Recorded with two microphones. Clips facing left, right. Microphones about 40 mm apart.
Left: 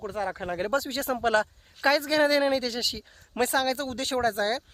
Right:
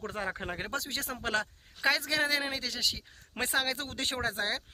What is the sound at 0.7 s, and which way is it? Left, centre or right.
A man's voice, centre.